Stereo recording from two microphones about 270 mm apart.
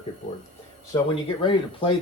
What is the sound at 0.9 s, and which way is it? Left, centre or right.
Speech, centre.